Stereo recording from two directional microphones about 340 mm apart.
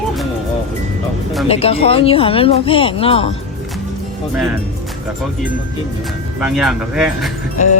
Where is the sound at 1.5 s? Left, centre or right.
Centre.